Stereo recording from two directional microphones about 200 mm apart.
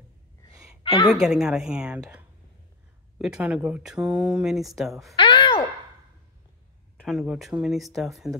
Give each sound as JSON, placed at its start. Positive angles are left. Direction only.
{"t": 1.2, "sound": "speech", "side_deg": -5}
{"t": 3.2, "sound": "speech", "side_deg": -5}
{"t": 5.1, "sound": "a sound", "side_deg": 25}
{"t": 7.0, "sound": "speech", "side_deg": 0}